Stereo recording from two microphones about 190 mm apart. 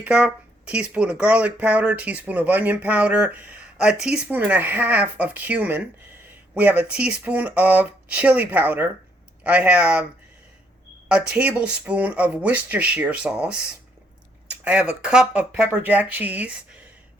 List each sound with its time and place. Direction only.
0.0 s speech: 5° right (ahead or behind)
11.1 s speech: 5° right (ahead or behind)